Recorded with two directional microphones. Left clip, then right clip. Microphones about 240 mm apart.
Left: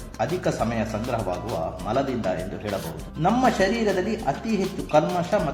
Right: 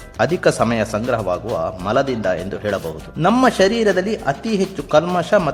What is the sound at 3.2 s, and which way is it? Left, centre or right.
Speech, right.